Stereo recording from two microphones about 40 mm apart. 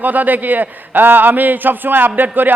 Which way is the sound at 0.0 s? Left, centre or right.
Right.